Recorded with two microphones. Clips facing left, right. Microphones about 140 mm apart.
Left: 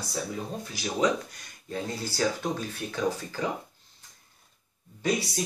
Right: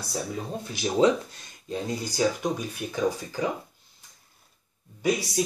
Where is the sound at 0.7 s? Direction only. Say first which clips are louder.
Right 5 dB; 25° right (ahead or behind).